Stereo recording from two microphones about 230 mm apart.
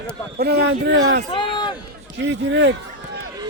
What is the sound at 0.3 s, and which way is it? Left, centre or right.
Speech, right.